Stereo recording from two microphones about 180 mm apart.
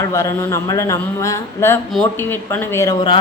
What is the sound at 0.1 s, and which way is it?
Speech, 15° left (ahead or behind).